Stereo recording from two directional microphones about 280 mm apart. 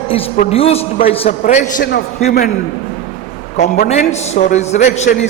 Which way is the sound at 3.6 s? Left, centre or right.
Left.